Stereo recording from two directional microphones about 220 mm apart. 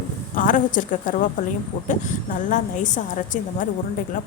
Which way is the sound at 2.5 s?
35° left (ahead or behind).